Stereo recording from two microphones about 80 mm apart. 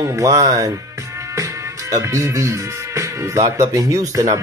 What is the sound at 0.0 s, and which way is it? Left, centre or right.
Speech, right.